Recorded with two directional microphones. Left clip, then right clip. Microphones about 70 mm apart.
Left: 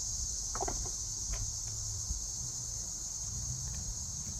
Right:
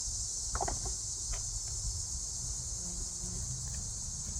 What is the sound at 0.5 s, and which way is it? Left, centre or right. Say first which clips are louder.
Chicken: right 2 dB; centre.